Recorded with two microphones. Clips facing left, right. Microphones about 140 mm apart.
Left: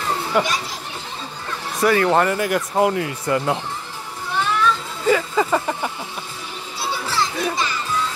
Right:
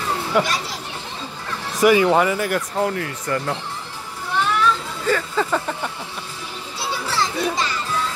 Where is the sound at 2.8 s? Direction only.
20° left (ahead or behind).